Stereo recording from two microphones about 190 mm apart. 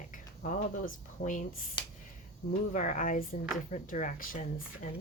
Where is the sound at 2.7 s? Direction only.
40° left (ahead or behind).